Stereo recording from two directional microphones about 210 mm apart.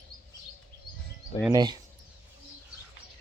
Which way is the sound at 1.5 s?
20° right (ahead or behind).